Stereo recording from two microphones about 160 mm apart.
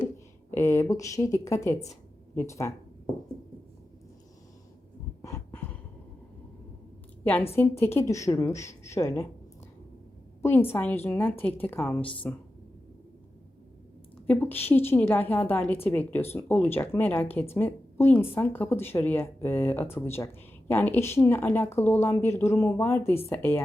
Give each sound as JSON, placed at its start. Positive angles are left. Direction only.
{"t": 0.5, "sound": "speech", "side_deg": 20}
{"t": 5.2, "sound": "a sound", "side_deg": 15}
{"t": 7.5, "sound": "speech", "side_deg": 15}
{"t": 10.4, "sound": "speech", "side_deg": 15}
{"t": 14.3, "sound": "speech", "side_deg": 10}